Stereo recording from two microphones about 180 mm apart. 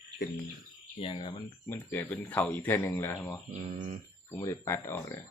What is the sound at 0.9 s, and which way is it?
Speech, 30° left (ahead or behind).